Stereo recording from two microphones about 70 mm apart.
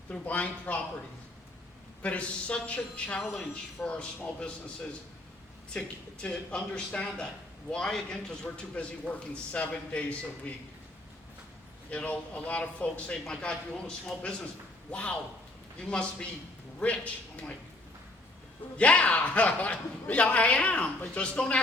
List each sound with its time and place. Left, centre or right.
0.1 s speech: left
2.0 s speech: centre
3.2 s a man's voice: centre
11.9 s a man's voice: centre
18.8 s speech: centre